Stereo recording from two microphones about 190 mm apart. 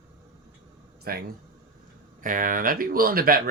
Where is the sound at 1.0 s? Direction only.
55° right (ahead or behind).